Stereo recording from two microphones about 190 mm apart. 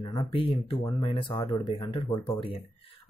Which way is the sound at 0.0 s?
25° left (ahead or behind).